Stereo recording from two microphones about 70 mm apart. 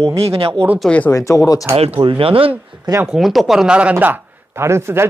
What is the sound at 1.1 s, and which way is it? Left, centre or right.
Speech, left.